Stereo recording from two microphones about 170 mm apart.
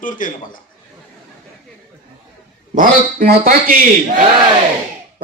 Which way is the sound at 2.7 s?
55° right (ahead or behind).